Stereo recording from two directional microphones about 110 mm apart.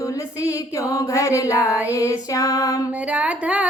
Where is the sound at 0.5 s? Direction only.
30° left (ahead or behind).